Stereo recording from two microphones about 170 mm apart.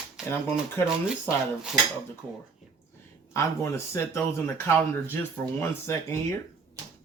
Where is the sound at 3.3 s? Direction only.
15° left (ahead or behind).